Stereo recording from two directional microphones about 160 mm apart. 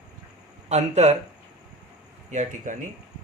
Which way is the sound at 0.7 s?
45° right (ahead or behind).